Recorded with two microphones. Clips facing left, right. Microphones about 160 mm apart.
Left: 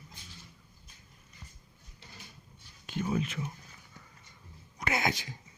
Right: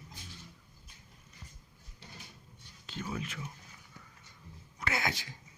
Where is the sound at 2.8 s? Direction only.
15° left (ahead or behind).